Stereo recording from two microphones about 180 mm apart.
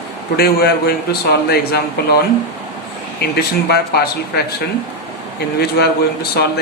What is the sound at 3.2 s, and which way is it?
Speech, 60° left (ahead or behind).